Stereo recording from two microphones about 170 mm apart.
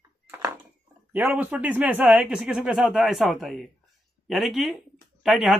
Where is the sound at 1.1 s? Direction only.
10° right (ahead or behind).